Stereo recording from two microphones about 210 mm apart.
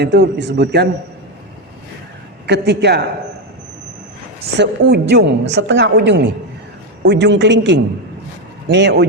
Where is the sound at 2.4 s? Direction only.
55° right (ahead or behind).